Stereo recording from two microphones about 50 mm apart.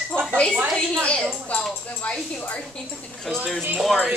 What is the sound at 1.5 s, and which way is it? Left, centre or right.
Speech, left.